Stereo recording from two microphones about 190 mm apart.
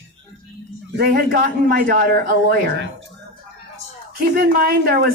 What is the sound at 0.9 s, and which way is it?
A man's voice, 50° right (ahead or behind).